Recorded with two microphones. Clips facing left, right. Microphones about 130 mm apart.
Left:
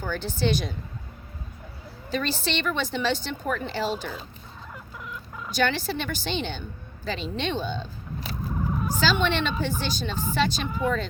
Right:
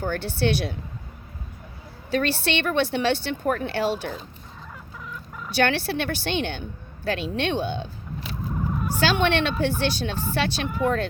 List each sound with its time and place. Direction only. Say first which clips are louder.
0.0 s a woman's voice: right 3 dB; 60° right (ahead or behind)
2.0 s a woman's voice: right 4 dB; 65° right (ahead or behind)
5.5 s a woman's voice: right 3 dB; 65° right (ahead or behind)
9.0 s a woman's voice: right 3 dB; 60° right (ahead or behind)